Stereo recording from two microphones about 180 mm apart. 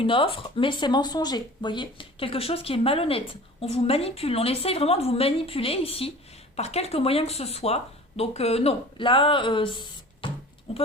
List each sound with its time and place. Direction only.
0.0 s speech: 30° left (ahead or behind)